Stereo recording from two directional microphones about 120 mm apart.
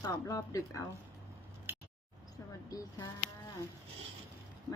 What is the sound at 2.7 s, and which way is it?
Speech, 30° left (ahead or behind).